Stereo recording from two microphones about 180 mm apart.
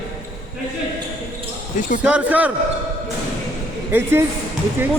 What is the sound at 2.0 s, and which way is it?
Speech, 10° right (ahead or behind).